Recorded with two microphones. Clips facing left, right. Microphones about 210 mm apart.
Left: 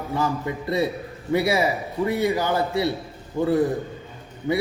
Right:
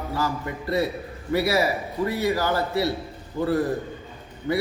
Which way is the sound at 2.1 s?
20° left (ahead or behind).